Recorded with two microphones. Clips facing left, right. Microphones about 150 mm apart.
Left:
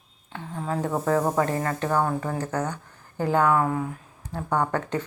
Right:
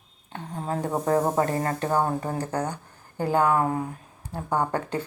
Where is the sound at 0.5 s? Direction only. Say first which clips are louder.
Left 1 dB; 35° right (ahead or behind).